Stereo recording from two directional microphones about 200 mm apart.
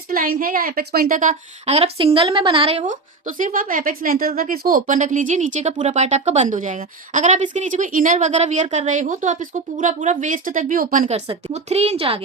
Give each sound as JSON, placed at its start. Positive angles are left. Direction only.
{"t": 0.1, "sound": "a woman's voice", "side_deg": -45}